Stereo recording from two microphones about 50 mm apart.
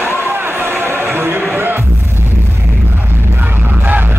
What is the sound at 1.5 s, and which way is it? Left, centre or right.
Music, right.